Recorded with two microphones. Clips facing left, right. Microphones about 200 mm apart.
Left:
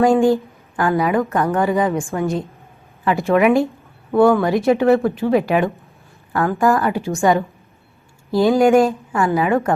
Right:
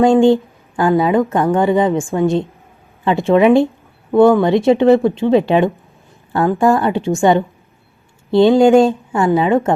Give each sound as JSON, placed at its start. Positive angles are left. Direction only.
{"t": 0.0, "sound": "speech", "side_deg": -20}
{"t": 3.3, "sound": "speech", "side_deg": -25}